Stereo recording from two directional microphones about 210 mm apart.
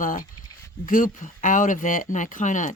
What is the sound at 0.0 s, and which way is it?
Speech, 40° left (ahead or behind).